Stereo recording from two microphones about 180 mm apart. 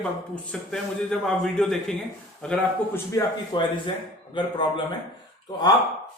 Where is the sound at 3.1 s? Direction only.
25° left (ahead or behind).